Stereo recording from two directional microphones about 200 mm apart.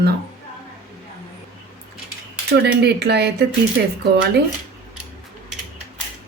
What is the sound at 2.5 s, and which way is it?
Speech, 55° right (ahead or behind).